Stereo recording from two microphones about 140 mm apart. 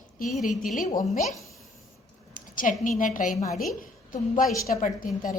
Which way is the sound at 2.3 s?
75° left (ahead or behind).